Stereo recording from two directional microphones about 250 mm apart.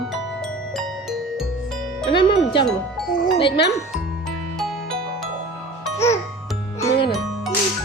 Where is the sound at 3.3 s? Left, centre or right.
Left.